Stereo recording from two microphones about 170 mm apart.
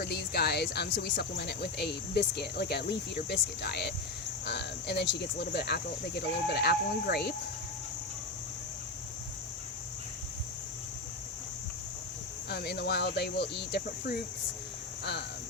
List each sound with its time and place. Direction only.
0.0 s speech: 70° left (ahead or behind)
12.5 s speech: 70° left (ahead or behind)